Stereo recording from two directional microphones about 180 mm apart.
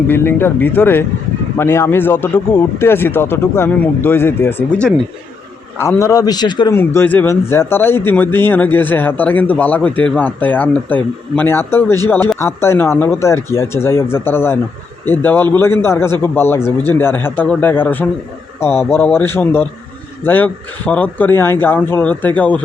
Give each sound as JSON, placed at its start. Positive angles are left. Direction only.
{"t": 0.1, "sound": "speech", "side_deg": 15}
{"t": 6.7, "sound": "speech", "side_deg": 10}